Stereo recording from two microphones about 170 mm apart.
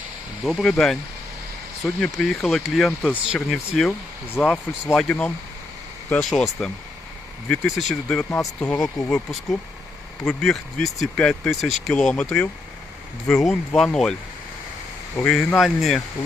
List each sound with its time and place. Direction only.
0.4 s speech: centre (ahead or behind)
8.7 s speech: 20° left (ahead or behind)
9.0 s speech: 5° left (ahead or behind)
15.2 s speech: 5° left (ahead or behind)